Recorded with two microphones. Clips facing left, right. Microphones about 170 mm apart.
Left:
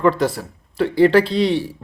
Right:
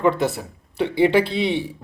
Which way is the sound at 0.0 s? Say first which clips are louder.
Left 2 dB; 20° right (ahead or behind).